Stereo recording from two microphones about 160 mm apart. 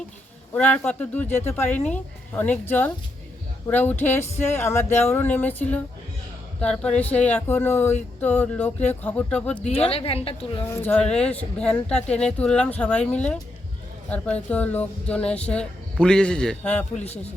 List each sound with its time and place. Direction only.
0.5 s speech: 10° left (ahead or behind)
9.6 s a woman's voice: 40° left (ahead or behind)
10.6 s speech: 15° left (ahead or behind)
14.5 s a man's voice: 10° left (ahead or behind)
17.0 s a woman's voice: 40° left (ahead or behind)